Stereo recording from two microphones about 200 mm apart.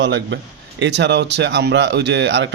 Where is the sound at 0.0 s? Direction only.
65° right (ahead or behind).